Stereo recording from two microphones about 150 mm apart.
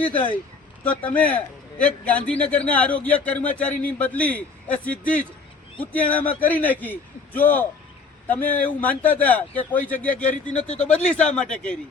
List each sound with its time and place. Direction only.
0.9 s a man's voice: 10° left (ahead or behind)
10.6 s speech: 50° left (ahead or behind)
10.8 s a man's voice: 5° left (ahead or behind)